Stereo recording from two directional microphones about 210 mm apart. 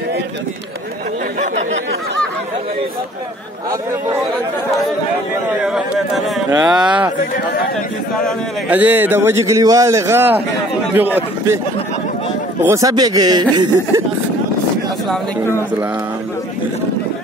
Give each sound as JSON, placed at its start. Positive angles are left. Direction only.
{"t": 5.6, "sound": "a man's voice", "side_deg": -5}
{"t": 7.2, "sound": "speech", "side_deg": 45}
{"t": 8.6, "sound": "a man's voice", "side_deg": -5}
{"t": 12.6, "sound": "speech", "side_deg": -15}